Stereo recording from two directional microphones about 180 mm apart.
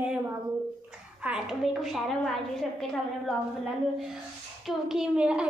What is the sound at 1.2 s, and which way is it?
A woman's voice, 5° right (ahead or behind).